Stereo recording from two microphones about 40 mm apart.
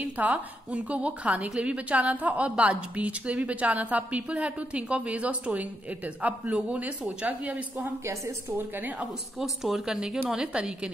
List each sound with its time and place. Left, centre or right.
0.0 s a woman's voice: right
8.5 s a woman's voice: right
9.4 s a woman's voice: centre; by 10.9 s right